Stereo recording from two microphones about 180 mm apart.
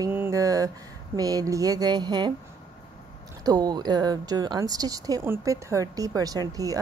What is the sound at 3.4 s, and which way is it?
Speech, 20° right (ahead or behind).